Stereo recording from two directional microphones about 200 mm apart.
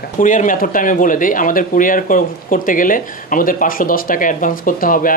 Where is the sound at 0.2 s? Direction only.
40° left (ahead or behind).